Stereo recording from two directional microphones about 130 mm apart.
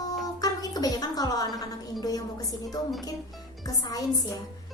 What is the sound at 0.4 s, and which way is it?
A woman's voice, 30° left (ahead or behind).